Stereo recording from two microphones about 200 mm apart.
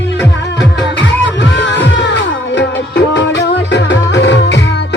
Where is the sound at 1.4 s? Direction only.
65° left (ahead or behind).